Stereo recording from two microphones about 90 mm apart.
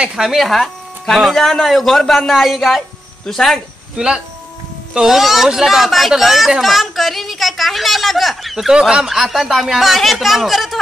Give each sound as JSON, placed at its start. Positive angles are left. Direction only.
{"t": 0.0, "sound": "speech", "side_deg": -5}
{"t": 3.9, "sound": "speech", "side_deg": -10}